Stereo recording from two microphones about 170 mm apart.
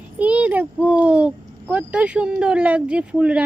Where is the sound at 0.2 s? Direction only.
10° right (ahead or behind).